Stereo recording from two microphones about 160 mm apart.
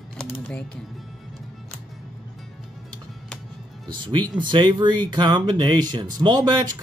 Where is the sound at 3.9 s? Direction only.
30° right (ahead or behind).